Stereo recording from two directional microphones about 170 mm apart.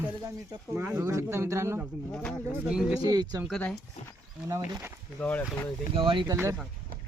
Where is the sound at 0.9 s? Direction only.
15° right (ahead or behind).